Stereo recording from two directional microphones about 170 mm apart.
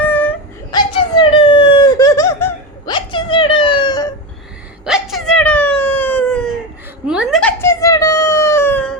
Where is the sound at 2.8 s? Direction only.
30° left (ahead or behind).